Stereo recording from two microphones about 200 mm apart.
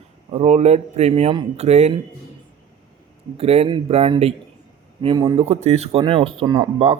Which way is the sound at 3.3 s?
30° right (ahead or behind).